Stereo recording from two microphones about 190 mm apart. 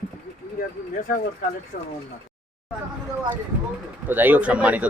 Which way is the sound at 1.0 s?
45° left (ahead or behind).